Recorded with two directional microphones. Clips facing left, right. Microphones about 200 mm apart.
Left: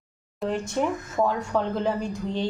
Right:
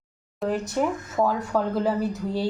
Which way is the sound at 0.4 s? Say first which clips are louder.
Right 1 dB; 5° right (ahead or behind).